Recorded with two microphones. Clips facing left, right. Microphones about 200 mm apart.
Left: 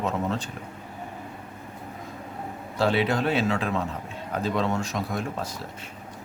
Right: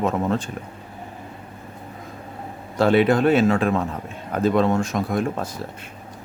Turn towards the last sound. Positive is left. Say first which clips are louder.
# right 6 dB
turn(degrees=-50)  # may be behind; listen again after turning